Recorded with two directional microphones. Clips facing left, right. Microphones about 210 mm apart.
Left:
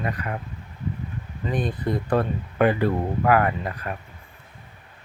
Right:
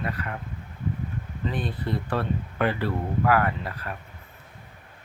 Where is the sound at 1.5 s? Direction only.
45° left (ahead or behind).